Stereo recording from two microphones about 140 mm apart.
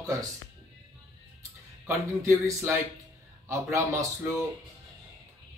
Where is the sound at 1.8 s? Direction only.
20° right (ahead or behind).